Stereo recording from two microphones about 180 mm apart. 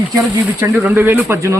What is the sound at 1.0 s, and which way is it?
Speech, 15° right (ahead or behind).